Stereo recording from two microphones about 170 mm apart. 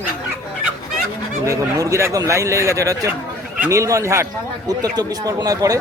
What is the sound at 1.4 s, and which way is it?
Speech, 15° right (ahead or behind).